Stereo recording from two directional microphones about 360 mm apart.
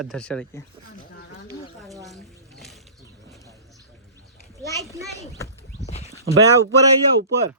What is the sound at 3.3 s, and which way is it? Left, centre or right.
Bird, centre.